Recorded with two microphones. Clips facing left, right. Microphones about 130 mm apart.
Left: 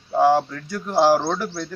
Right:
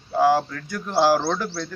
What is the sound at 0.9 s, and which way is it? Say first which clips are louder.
Speech: left 2 dB; 20° left (ahead or behind).